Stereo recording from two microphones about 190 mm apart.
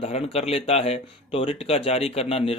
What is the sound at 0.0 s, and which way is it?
Speech, 35° left (ahead or behind).